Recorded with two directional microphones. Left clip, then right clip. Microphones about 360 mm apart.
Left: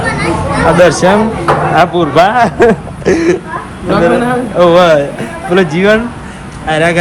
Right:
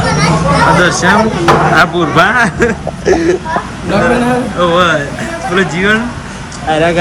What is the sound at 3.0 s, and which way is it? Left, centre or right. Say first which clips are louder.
Speech: right 1 dB; centre.